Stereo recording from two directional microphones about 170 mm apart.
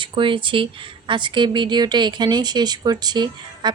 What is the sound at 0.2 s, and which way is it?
Speech, 30° right (ahead or behind).